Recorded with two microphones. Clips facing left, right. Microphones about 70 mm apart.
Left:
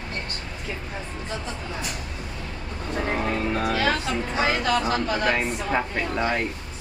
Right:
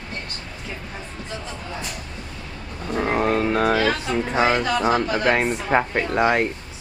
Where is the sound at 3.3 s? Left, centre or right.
Right.